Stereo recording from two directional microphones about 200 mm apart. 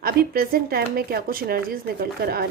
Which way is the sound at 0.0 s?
50° right (ahead or behind).